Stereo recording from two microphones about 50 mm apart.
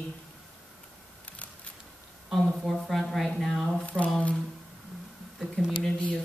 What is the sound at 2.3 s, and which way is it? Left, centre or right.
Speech, centre.